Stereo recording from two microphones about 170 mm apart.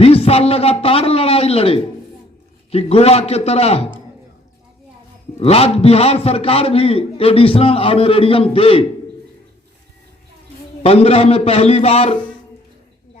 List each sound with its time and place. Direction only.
0.0 s a man's voice: 35° left (ahead or behind)
5.4 s a man's voice: 35° left (ahead or behind)
10.8 s a man's voice: 35° left (ahead or behind)